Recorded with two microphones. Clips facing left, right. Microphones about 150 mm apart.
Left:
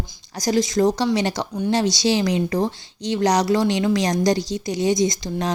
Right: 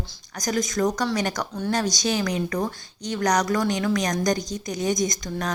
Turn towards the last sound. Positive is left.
turn(degrees=30)  # may be behind; listen again after turning